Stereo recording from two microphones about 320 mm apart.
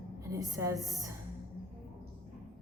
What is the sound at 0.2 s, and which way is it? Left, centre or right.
Speech, centre.